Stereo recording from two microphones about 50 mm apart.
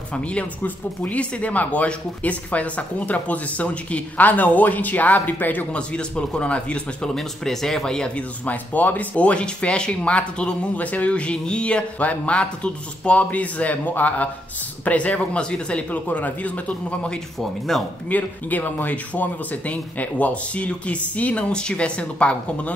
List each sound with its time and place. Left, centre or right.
0.1 s speech: left
5.7 s speech: left
7.2 s speech: centre
8.1 s speech: left
15.9 s speech: left
17.4 s speech: centre
18.0 s speech: left
21.5 s speech: centre